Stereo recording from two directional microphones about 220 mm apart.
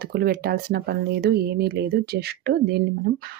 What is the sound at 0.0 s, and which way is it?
Speech, 45° right (ahead or behind).